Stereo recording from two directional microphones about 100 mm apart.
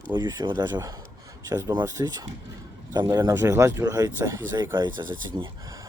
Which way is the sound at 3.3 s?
25° right (ahead or behind).